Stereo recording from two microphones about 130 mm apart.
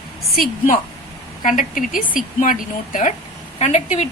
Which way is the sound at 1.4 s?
90° left.